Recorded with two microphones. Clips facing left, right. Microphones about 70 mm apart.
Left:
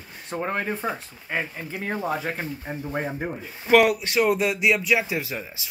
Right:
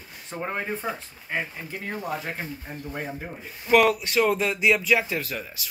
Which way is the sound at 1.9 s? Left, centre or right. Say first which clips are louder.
Left 4 dB; left.